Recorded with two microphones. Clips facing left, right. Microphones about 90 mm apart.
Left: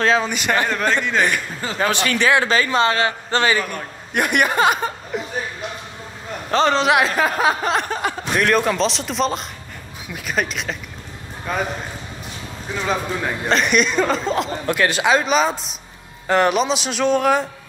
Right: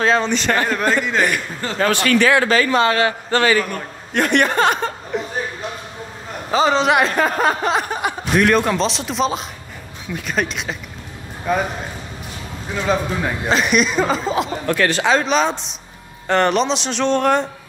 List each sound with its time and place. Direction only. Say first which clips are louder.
0.0 s speech: right 1 dB; centre (ahead or behind)
0.7 s speech: right 2 dB; 5° right (ahead or behind)
1.9 s a man's voice: right 3 dB; 20° left (ahead or behind)
4.1 s speech: right 2 dB; 10° left (ahead or behind)
6.5 s speech: right 1 dB; 5° right (ahead or behind)
8.0 s a man's voice: right 1 dB; 15° right (ahead or behind)
8.4 s speech: right 2 dB; centre (ahead or behind)
12.8 s speech: right 3 dB; centre (ahead or behind)
14.7 s speech: even; 15° left (ahead or behind)